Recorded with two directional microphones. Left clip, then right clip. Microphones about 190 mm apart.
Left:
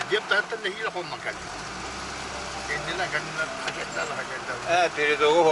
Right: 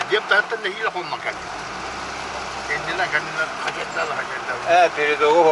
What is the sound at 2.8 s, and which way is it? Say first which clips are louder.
Speech: right 8 dB; 5° left (ahead or behind).